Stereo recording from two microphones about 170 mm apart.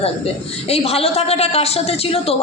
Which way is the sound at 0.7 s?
35° left (ahead or behind).